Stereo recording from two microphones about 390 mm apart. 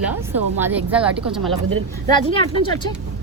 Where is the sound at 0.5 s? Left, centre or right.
Centre.